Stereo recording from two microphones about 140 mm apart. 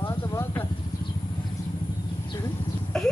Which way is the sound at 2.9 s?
5° left (ahead or behind).